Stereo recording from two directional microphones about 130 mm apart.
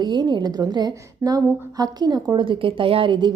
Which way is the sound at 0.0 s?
35° right (ahead or behind).